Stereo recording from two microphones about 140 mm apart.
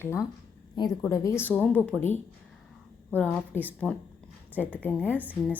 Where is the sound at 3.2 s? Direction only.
10° left (ahead or behind).